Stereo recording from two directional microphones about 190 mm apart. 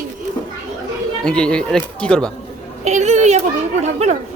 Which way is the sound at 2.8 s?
40° right (ahead or behind).